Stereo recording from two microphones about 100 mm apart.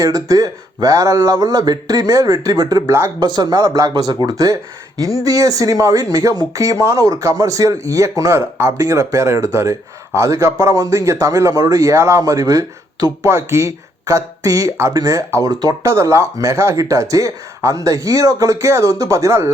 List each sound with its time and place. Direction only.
0.0 s a man's voice: 35° right (ahead or behind)